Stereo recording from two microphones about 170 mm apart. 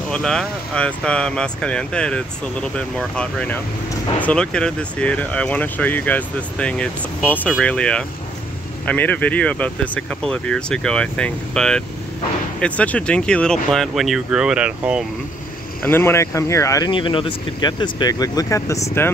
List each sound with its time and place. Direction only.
0.1 s speech: 5° left (ahead or behind)
15.8 s speech: 15° left (ahead or behind)